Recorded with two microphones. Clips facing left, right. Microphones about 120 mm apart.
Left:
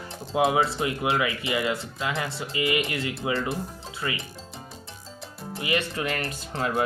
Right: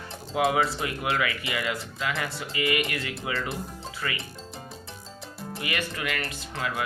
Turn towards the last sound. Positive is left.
turn(degrees=35)  # may be behind; listen again after turning